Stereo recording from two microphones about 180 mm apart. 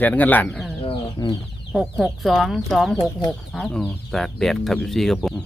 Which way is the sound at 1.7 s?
Centre (ahead or behind).